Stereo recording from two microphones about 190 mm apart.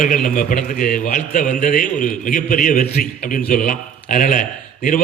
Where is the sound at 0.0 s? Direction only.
45° left (ahead or behind).